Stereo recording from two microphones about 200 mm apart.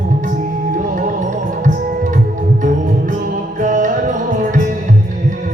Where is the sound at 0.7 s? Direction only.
40° right (ahead or behind).